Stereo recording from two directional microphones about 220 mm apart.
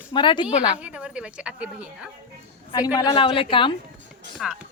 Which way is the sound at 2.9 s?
20° left (ahead or behind).